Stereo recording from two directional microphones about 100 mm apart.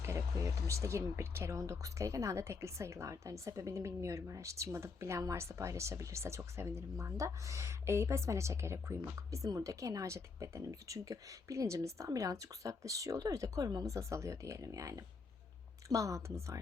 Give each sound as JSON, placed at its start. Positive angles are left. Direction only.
{"t": 0.0, "sound": "speech", "side_deg": -30}